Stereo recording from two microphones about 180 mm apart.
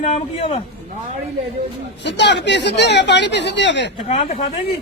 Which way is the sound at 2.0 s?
75° left (ahead or behind).